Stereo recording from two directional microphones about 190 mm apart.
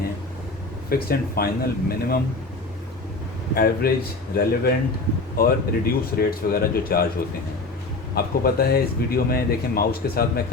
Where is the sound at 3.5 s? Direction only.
55° left (ahead or behind).